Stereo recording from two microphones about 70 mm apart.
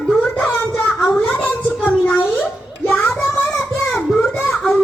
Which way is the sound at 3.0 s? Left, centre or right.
Left.